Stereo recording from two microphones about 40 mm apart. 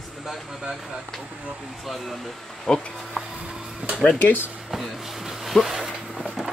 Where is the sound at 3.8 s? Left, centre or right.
Right.